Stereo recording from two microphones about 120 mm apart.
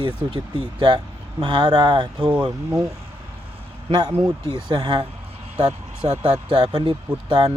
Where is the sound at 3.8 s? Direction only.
40° right (ahead or behind).